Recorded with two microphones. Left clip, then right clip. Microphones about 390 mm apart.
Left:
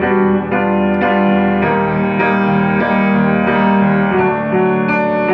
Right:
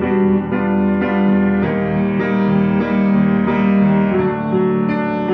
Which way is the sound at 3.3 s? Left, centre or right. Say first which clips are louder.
Left 4 dB; left.